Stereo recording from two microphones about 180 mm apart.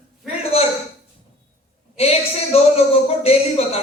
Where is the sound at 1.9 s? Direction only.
35° left (ahead or behind).